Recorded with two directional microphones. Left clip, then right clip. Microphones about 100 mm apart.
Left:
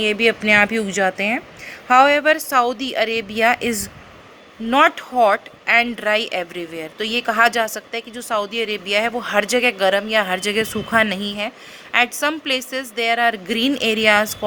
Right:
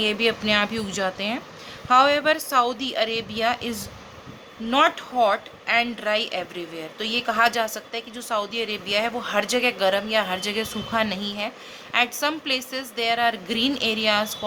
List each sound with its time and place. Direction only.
0.0 s speech: 40° left (ahead or behind)
1.9 s speech: 55° left (ahead or behind)